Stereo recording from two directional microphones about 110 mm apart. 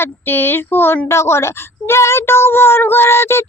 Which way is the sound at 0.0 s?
20° left (ahead or behind).